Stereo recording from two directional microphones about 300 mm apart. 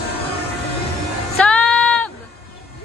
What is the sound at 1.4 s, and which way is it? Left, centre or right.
Music, centre.